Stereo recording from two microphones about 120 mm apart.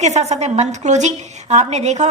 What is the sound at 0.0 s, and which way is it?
A woman's voice, 70° right (ahead or behind).